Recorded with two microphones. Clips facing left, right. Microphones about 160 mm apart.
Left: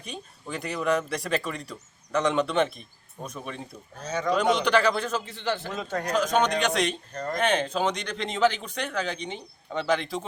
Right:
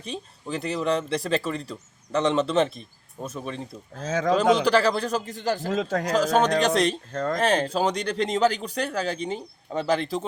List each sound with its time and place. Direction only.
0.0 s speech: 30° right (ahead or behind)
3.9 s speech: 90° right
4.6 s speech: 35° right (ahead or behind)
5.7 s speech: 90° right
6.1 s speech: 35° right (ahead or behind)
7.1 s speech: 90° right
7.3 s speech: 35° right (ahead or behind)